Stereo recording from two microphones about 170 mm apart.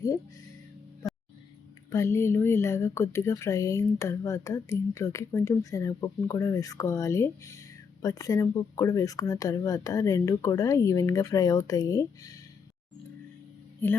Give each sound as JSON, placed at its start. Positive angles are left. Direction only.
{"t": 1.9, "sound": "speech", "side_deg": 15}